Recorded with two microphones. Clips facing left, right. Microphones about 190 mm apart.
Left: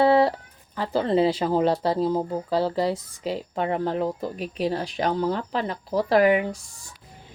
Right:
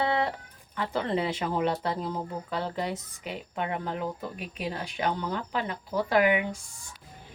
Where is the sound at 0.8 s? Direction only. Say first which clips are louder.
Left 7 dB; 30° left (ahead or behind).